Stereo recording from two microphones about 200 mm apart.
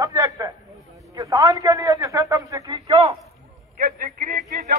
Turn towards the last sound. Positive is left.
turn(degrees=-45)  # may be behind; listen again after turning